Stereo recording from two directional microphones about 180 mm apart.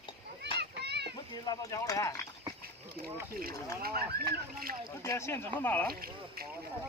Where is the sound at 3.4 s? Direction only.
55° right (ahead or behind).